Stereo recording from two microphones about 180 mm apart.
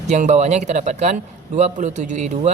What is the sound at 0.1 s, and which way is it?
A man's voice, 40° right (ahead or behind).